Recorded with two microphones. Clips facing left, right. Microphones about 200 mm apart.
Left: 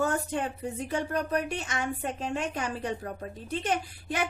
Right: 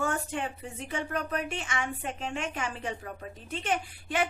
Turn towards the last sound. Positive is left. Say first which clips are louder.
# right 1 dB
turn(degrees=40)  # may be behind; listen again after turning